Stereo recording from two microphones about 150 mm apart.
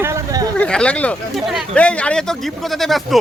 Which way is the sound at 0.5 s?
5° left (ahead or behind).